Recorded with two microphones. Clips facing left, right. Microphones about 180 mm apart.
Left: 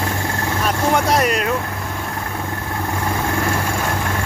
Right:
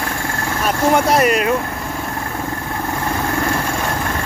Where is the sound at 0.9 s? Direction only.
5° right (ahead or behind).